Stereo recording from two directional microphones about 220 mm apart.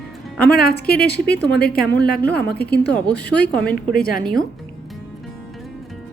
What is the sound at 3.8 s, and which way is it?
Speech, 45° left (ahead or behind).